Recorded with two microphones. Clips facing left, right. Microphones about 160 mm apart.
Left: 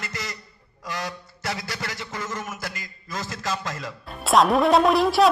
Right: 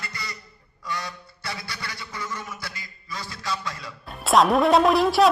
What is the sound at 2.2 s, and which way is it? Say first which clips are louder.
A man's voice: left 1 dB; 45° left (ahead or behind).